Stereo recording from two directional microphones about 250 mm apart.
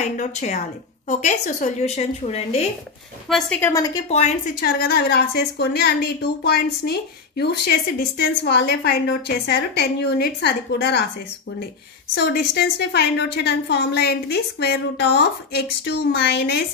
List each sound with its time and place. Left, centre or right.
0.2 s a woman's voice: left
3.3 s a woman's voice: centre
3.9 s a woman's voice: left
4.6 s a woman's voice: left
12.2 s a woman's voice: left